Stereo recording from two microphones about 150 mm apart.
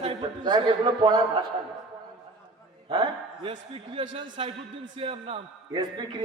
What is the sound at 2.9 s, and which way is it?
A man's voice, 30° right (ahead or behind).